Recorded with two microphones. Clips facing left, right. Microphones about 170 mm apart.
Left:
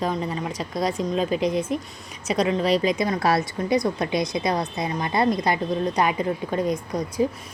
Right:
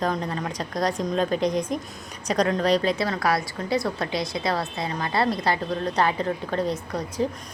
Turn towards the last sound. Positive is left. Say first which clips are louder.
# left 3 dB
turn(degrees=10)  # may be behind; listen again after turning